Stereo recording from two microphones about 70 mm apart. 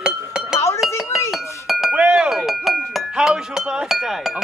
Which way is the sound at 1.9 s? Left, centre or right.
Centre.